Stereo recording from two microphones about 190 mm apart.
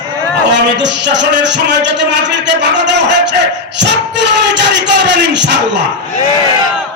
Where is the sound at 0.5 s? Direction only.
70° right (ahead or behind).